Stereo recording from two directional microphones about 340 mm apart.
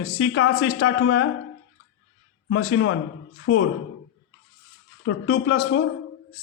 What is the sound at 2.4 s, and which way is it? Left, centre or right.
Speech, left.